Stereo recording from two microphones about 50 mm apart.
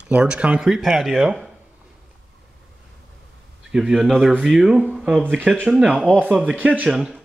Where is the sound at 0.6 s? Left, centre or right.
Centre.